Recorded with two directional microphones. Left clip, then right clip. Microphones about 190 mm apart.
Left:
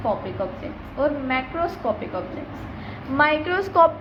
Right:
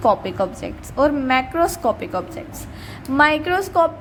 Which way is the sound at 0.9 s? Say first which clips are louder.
Right 6 dB; 40° right (ahead or behind).